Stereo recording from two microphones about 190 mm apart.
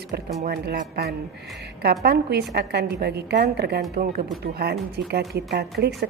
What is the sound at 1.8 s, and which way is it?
A woman's voice, 55° right (ahead or behind).